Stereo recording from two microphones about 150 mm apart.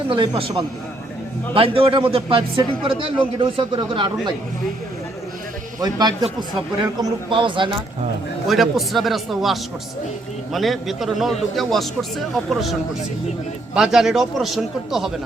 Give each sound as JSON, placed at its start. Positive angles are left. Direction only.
{"t": 0.1, "sound": "speech", "side_deg": -35}
{"t": 5.8, "sound": "a man's voice", "side_deg": -25}
{"t": 8.4, "sound": "a man's voice", "side_deg": 0}
{"t": 13.7, "sound": "a man's voice", "side_deg": -5}